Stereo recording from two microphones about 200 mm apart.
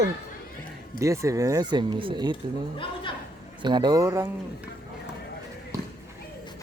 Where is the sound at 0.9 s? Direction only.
15° right (ahead or behind).